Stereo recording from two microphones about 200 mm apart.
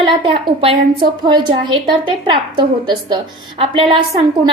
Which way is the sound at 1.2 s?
25° right (ahead or behind).